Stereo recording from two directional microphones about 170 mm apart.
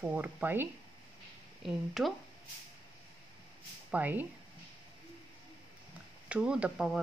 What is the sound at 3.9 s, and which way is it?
Speech, 10° right (ahead or behind).